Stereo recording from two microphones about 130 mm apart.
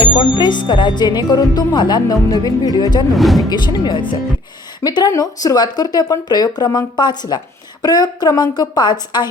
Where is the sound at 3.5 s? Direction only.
35° left (ahead or behind).